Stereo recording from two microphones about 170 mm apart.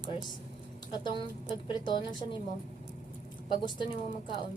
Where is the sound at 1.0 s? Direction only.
25° left (ahead or behind).